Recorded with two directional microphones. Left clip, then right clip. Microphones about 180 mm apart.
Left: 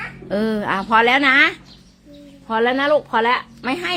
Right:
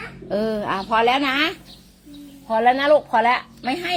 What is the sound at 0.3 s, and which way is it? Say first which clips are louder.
A woman's voice: left 1 dB; 25° left (ahead or behind).